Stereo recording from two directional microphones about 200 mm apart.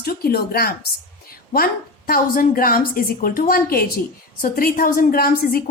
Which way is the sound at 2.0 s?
45° left (ahead or behind).